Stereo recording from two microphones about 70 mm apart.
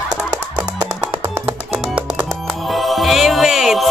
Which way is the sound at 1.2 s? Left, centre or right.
Right.